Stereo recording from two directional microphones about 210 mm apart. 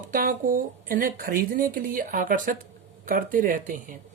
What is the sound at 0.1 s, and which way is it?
Speech, 40° right (ahead or behind).